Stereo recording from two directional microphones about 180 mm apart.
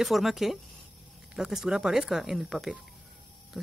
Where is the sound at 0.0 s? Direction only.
Centre (ahead or behind).